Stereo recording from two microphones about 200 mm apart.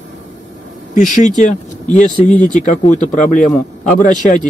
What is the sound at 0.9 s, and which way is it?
Speech, 40° left (ahead or behind).